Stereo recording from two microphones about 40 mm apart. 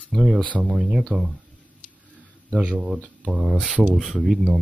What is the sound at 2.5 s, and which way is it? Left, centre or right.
Speech, right.